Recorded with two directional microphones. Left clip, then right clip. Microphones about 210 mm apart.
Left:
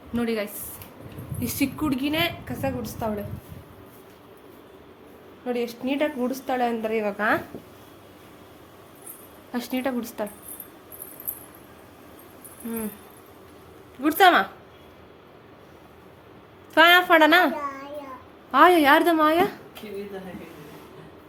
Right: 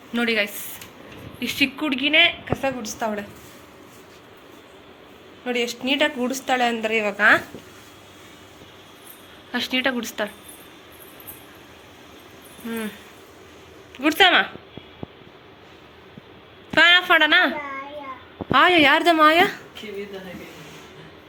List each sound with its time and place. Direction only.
0.1 s a woman's voice: 5° left (ahead or behind)
5.5 s a woman's voice: centre (ahead or behind)
9.5 s a woman's voice: 15° left (ahead or behind)
14.0 s a woman's voice: 15° left (ahead or behind)
16.7 s a woman's voice: 15° left (ahead or behind)
18.5 s a woman's voice: 10° left (ahead or behind)